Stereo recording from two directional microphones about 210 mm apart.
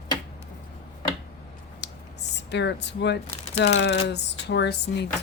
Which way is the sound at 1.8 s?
55° left (ahead or behind).